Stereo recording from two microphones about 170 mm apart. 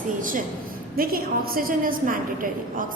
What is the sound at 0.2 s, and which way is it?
A woman's voice, 50° right (ahead or behind).